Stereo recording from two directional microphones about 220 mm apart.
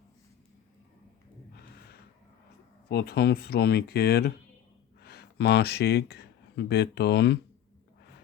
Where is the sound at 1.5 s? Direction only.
45° left (ahead or behind).